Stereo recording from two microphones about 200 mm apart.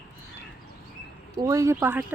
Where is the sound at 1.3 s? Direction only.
15° right (ahead or behind).